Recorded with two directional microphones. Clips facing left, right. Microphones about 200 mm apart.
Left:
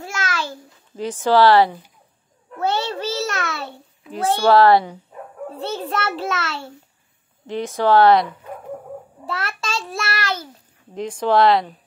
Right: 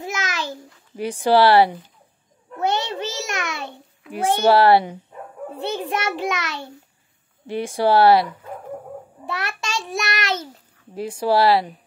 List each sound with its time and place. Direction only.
0.0 s babbling: 15° right (ahead or behind)
2.5 s a sound: 20° right (ahead or behind)
4.1 s a child's voice: 15° right (ahead or behind)
9.4 s child singing: 15° right (ahead or behind)
11.0 s a child's voice: 10° right (ahead or behind)